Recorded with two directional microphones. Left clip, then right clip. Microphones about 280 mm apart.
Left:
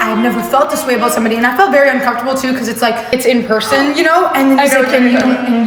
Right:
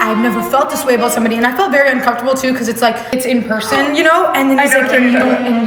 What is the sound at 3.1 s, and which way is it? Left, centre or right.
Speech, left.